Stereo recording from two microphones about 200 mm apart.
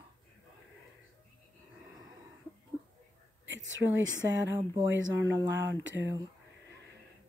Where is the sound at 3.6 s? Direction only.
70° right (ahead or behind).